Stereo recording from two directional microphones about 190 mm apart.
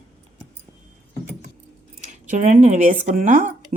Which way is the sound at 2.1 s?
40° right (ahead or behind).